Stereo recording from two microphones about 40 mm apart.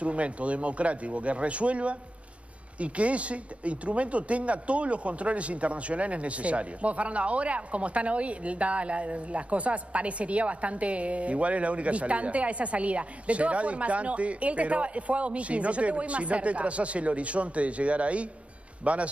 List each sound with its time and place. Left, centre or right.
0.0 s speech: right